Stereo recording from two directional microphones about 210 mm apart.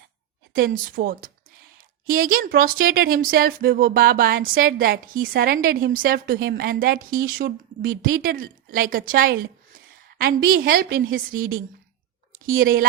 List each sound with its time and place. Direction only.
0.5 s a woman's voice: 45° right (ahead or behind)